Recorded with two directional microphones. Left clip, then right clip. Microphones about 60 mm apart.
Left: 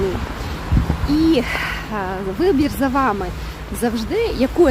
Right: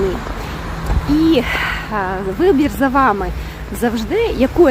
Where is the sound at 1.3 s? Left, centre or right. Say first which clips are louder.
Right 3 dB; centre.